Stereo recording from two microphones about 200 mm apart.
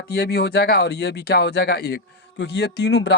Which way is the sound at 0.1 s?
55° left (ahead or behind).